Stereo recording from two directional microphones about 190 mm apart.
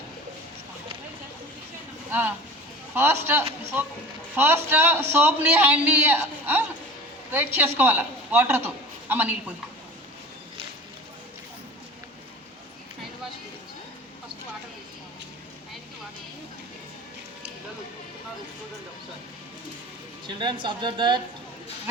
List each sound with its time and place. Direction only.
2.0 s a man's voice: 10° right (ahead or behind)
20.2 s speech: 25° right (ahead or behind)